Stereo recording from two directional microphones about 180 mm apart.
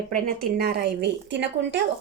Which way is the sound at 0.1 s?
55° right (ahead or behind).